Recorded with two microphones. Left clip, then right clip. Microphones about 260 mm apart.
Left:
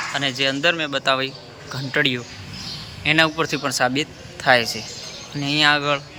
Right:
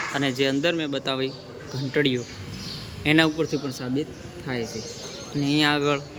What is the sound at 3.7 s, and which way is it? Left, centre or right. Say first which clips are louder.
Speech: left 13 dB; left.